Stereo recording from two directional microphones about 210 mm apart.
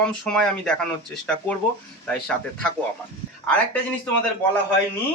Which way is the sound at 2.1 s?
5° left (ahead or behind).